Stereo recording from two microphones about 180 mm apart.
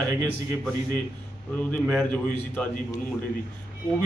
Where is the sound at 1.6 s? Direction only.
10° left (ahead or behind).